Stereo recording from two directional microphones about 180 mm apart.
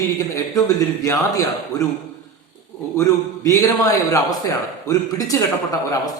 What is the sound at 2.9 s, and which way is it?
A man's voice, 15° left (ahead or behind).